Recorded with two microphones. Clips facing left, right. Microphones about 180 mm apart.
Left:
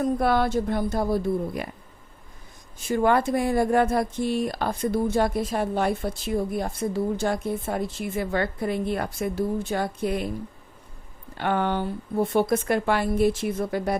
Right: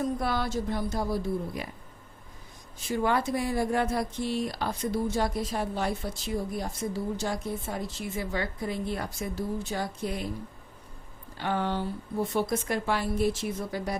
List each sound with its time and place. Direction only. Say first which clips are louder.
0.0 s speech: left 7 dB; 60° left (ahead or behind)
2.9 s speech: left 6 dB; 50° left (ahead or behind)
11.3 s speech: left 5 dB; 60° left (ahead or behind)